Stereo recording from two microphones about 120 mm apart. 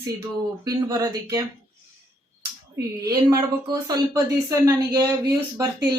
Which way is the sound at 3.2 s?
35° right (ahead or behind).